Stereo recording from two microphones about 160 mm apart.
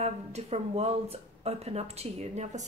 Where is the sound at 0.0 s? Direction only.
40° right (ahead or behind).